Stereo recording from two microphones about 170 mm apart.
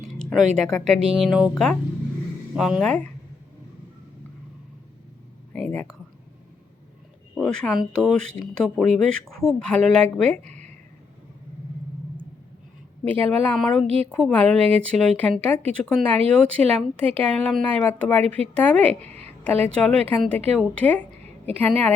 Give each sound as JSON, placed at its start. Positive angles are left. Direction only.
{"t": 0.0, "sound": "a sound", "side_deg": 0}
{"t": 0.5, "sound": "speech", "side_deg": 5}
{"t": 5.5, "sound": "speech", "side_deg": 5}
{"t": 7.3, "sound": "speech", "side_deg": 5}
{"t": 10.4, "sound": "a sound", "side_deg": -45}
{"t": 13.1, "sound": "speech", "side_deg": 10}
{"t": 13.8, "sound": "a woman's voice", "side_deg": -40}
{"t": 14.1, "sound": "speech", "side_deg": 5}